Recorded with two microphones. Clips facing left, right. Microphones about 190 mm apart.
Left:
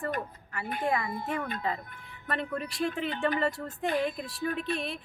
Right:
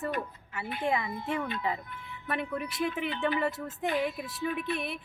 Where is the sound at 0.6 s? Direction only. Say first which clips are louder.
Left 1 dB; 45° left (ahead or behind).